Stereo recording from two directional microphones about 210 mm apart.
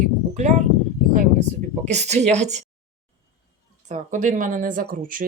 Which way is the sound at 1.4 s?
35° right (ahead or behind).